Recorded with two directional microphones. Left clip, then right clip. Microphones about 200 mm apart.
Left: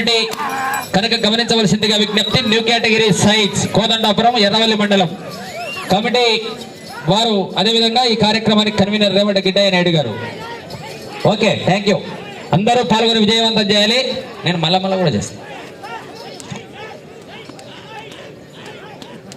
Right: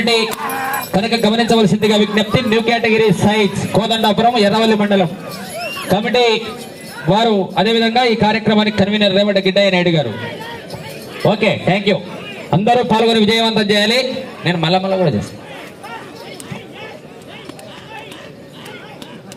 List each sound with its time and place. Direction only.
0.0 s speech: 35° left (ahead or behind)
0.3 s fowl: 10° left (ahead or behind)
0.9 s a man's voice: 25° left (ahead or behind)
3.1 s a man's voice: centre (ahead or behind)
5.5 s a sound: 10° right (ahead or behind)
7.1 s a man's voice: 5° right (ahead or behind)
11.3 s a man's voice: 20° right (ahead or behind)